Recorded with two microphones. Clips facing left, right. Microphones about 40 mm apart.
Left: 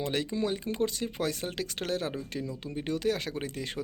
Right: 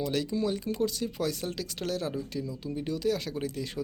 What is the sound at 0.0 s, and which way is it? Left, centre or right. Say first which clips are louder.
Speech: right 1 dB; left.